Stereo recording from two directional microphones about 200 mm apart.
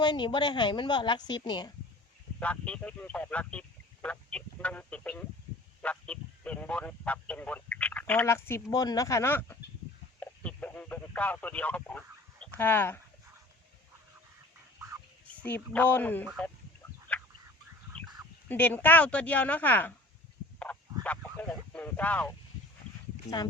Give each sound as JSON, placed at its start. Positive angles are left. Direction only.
{"t": 0.0, "sound": "a woman's voice", "side_deg": 20}
{"t": 2.4, "sound": "speech", "side_deg": 5}
{"t": 10.2, "sound": "radio", "side_deg": 5}
{"t": 15.4, "sound": "speech", "side_deg": 10}
{"t": 17.1, "sound": "a sound", "side_deg": 10}
{"t": 18.4, "sound": "speech", "side_deg": 10}
{"t": 20.7, "sound": "a sound", "side_deg": 5}
{"t": 21.3, "sound": "speech", "side_deg": 5}